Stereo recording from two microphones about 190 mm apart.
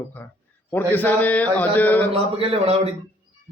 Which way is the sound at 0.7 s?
10° left (ahead or behind).